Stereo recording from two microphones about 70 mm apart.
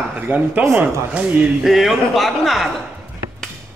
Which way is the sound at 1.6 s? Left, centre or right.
Centre.